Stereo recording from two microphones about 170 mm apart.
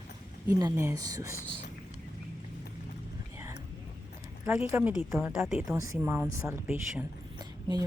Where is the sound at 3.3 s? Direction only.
15° right (ahead or behind).